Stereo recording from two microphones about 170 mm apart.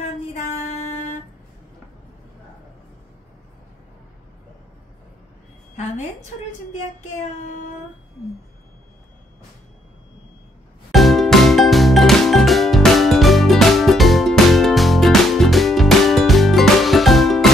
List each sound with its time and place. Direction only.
0.0 s music: 40° left (ahead or behind)
7.0 s child singing: 45° left (ahead or behind)
10.9 s music: centre (ahead or behind)